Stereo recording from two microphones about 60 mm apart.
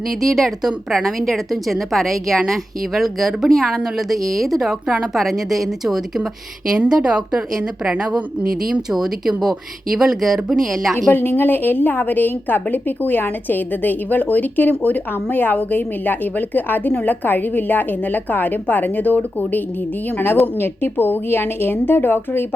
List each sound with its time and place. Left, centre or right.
0.1 s a woman's voice: centre
6.7 s a woman's voice: centre
11.1 s a woman's voice: left